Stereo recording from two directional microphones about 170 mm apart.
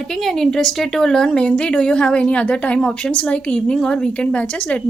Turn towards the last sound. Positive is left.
turn(degrees=5)  # may be behind; listen again after turning